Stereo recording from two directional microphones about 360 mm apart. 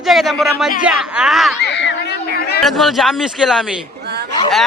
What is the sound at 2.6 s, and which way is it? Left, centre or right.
A man's voice, centre.